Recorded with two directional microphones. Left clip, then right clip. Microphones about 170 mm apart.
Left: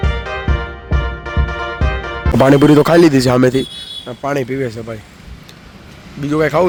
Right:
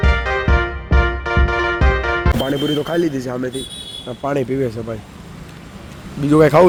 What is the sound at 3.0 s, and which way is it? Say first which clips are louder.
Speech: left 10 dB; 50° left (ahead or behind).